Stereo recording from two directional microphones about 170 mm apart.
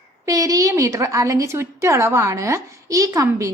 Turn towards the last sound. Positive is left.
turn(degrees=-20)  # may be behind; listen again after turning